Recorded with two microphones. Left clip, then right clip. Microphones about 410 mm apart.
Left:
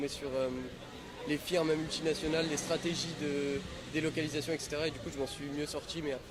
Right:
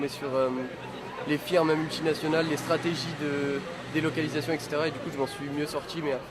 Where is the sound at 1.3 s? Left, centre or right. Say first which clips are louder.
Right 7 dB; centre.